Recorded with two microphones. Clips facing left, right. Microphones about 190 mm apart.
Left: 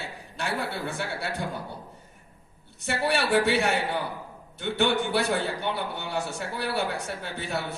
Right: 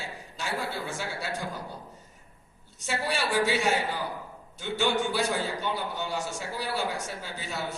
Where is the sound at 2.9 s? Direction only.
60° left (ahead or behind).